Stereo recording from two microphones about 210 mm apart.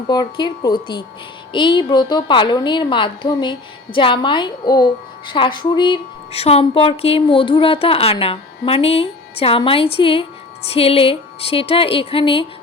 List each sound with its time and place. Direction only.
0.1 s a woman's voice: 20° left (ahead or behind)